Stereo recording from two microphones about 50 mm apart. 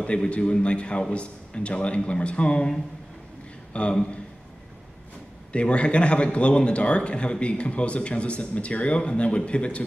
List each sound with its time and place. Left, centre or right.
0.0 s a man's voice: left
3.7 s a man's voice: left
5.5 s a man's voice: left